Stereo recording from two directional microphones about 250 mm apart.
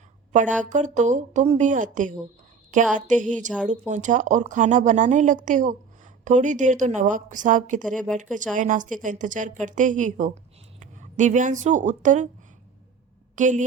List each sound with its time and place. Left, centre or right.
0.6 s a woman's voice: right
7.9 s speech: centre
8.2 s a woman's voice: right
13.3 s a woman's voice: right